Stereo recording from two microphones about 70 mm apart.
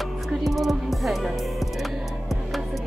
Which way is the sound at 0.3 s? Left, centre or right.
Centre.